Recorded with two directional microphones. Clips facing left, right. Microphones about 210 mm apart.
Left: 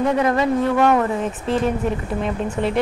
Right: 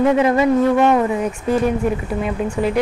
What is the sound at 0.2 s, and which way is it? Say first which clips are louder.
A woman's voice: right 4 dB; 15° right (ahead or behind).